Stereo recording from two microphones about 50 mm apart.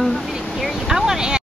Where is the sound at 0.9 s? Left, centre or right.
Centre.